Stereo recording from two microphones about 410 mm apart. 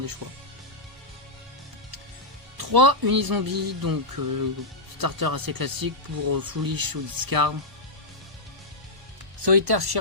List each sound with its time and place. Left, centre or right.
2.6 s speech: right
9.4 s speech: right